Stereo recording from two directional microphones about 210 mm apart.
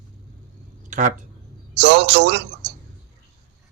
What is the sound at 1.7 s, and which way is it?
A man's voice, 55° right (ahead or behind).